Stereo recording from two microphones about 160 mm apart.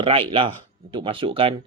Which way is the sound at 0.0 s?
35° right (ahead or behind).